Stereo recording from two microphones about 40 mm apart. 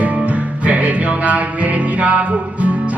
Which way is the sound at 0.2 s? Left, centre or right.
Right.